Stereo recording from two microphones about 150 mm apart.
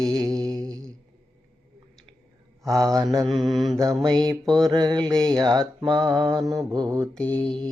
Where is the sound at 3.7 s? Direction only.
20° right (ahead or behind).